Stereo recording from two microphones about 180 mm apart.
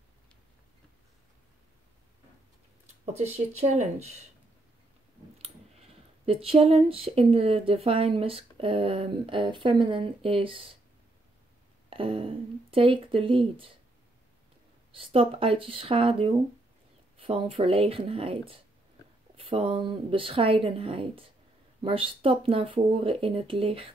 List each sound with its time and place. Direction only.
3.1 s speech: 35° right (ahead or behind)
5.4 s speech: 35° right (ahead or behind)
11.9 s speech: 30° right (ahead or behind)
14.9 s speech: 30° right (ahead or behind)